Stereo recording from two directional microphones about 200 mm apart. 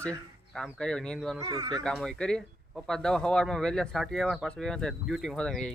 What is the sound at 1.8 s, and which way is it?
Speech, 5° left (ahead or behind).